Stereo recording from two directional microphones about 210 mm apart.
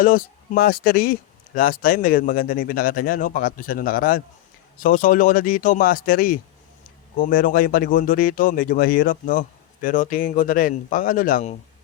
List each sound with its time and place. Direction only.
0.0 s speech: 40° left (ahead or behind)